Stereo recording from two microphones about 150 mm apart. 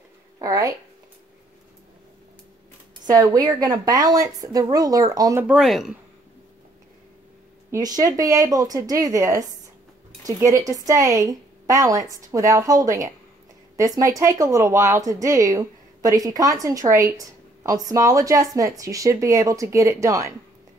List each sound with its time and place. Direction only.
0.4 s speech: 25° right (ahead or behind)
3.1 s a woman's voice: 25° right (ahead or behind)
5.5 s speech: centre (ahead or behind)
7.7 s a woman's voice: 25° right (ahead or behind)